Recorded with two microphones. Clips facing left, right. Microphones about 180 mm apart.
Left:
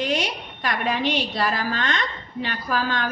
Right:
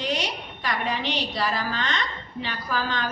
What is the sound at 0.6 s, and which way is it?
A woman's voice, 55° left (ahead or behind).